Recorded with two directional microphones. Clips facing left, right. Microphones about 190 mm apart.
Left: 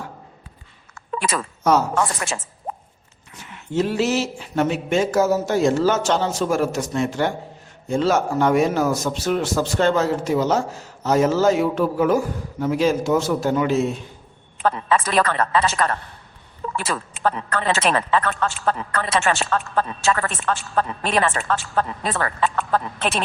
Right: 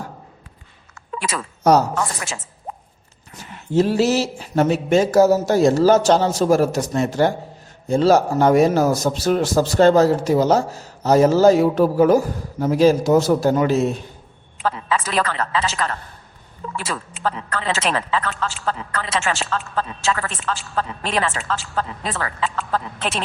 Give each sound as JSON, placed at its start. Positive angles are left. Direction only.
{"t": 1.7, "sound": "a man's voice", "side_deg": -40}
{"t": 3.3, "sound": "a man's voice", "side_deg": -35}
{"t": 14.6, "sound": "a woman's voice", "side_deg": 50}